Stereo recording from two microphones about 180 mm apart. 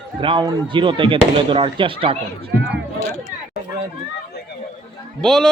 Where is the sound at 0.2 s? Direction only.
25° right (ahead or behind).